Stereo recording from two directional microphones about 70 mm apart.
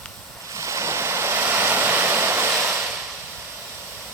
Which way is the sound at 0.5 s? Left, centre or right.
Right.